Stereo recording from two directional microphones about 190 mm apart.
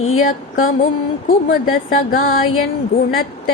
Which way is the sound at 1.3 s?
50° left (ahead or behind).